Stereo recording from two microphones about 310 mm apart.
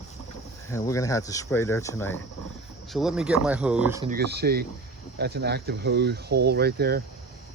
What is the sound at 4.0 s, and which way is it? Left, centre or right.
Speech, right.